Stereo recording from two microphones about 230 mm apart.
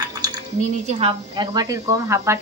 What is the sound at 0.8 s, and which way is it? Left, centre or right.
Speech, right.